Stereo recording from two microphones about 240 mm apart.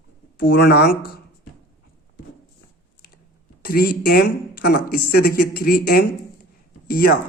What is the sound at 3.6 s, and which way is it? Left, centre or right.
Speech, left.